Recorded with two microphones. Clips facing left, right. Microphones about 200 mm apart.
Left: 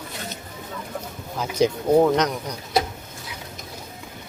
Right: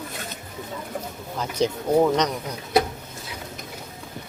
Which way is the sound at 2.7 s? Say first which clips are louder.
Right 2 dB; 60° right (ahead or behind).